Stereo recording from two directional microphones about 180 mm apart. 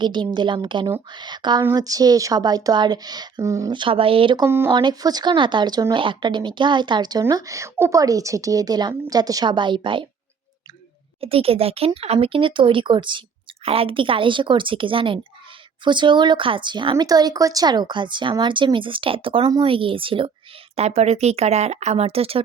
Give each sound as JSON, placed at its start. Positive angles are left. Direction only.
{"t": 0.0, "sound": "speech", "side_deg": -25}
{"t": 4.4, "sound": "speech", "side_deg": -15}
{"t": 4.7, "sound": "speech", "side_deg": -25}
{"t": 11.2, "sound": "speech", "side_deg": -30}